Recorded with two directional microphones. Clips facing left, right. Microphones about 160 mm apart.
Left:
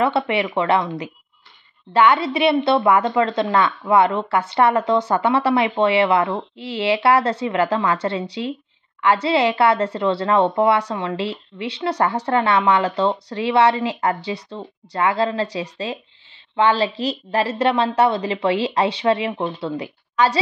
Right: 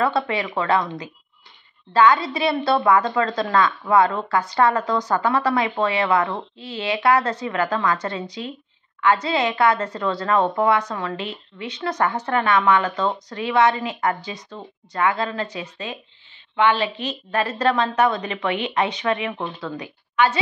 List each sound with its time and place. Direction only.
0.0 s a woman's voice: 25° left (ahead or behind)